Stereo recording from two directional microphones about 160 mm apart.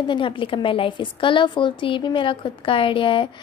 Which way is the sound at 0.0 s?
30° left (ahead or behind).